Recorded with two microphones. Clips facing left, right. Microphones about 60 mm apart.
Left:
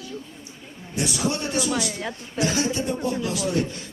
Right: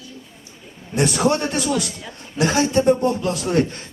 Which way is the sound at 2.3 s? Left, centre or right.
Right.